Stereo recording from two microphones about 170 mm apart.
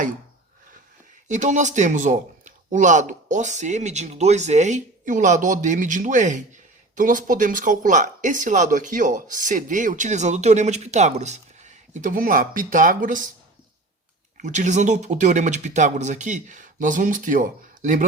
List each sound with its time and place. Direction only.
1.3 s speech: 45° right (ahead or behind)
14.3 s speech: 45° right (ahead or behind)